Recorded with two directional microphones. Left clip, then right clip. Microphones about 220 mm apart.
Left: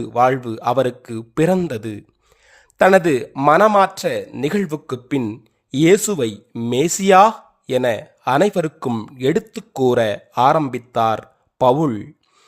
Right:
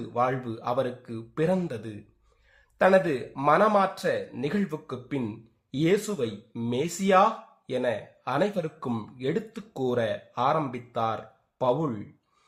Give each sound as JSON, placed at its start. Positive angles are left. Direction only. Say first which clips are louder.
{"t": 0.1, "sound": "speech", "louder": "left 11 dB", "side_deg": 50}